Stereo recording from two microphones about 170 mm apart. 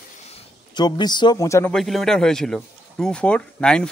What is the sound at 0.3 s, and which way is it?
Speech, 25° left (ahead or behind).